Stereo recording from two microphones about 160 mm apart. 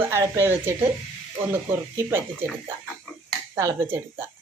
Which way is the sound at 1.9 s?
15° right (ahead or behind).